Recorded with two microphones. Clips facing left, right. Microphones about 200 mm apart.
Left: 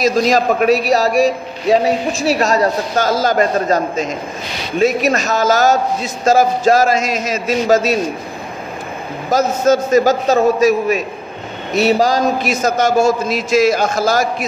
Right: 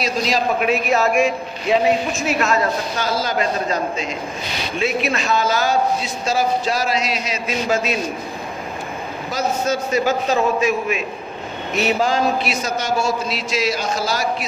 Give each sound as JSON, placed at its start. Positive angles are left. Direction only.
{"t": 0.0, "sound": "a man's voice", "side_deg": 45}
{"t": 9.3, "sound": "a man's voice", "side_deg": 45}